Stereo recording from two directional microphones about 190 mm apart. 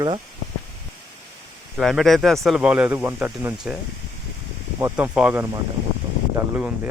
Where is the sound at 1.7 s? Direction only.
Centre (ahead or behind).